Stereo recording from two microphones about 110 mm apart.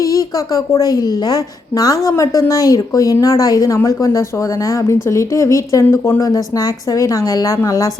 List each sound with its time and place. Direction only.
0.0 s a woman's voice: 30° left (ahead or behind)